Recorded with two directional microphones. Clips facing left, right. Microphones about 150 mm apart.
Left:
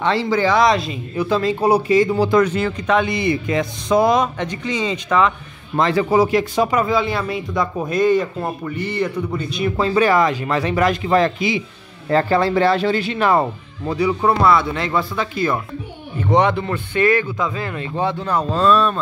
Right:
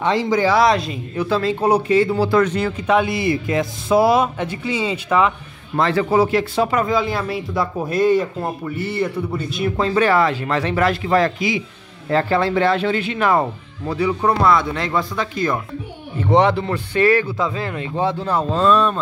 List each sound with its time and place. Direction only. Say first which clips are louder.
0.0 s speech: even; 15° right (ahead or behind)
1.1 s a man's voice: left 1 dB; 15° left (ahead or behind)
2.9 s speech: right 1 dB; 5° right (ahead or behind)
5.8 s speech: left 1 dB; 15° left (ahead or behind); by 9.8 s centre (ahead or behind)
9.9 s a man's voice: left 1 dB; 15° left (ahead or behind)
12.1 s speech: left 1 dB; 40° left (ahead or behind)
13.8 s speech: left 1 dB; 10° left (ahead or behind)
16.2 s speech: right 1 dB; 30° right (ahead or behind)
18.0 s speech: even; 30° right (ahead or behind)